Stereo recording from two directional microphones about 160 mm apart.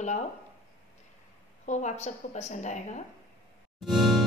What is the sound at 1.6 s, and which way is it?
A woman's voice, 50° left (ahead or behind).